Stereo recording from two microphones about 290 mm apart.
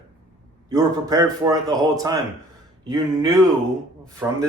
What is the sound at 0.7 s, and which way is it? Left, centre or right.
Speech, centre.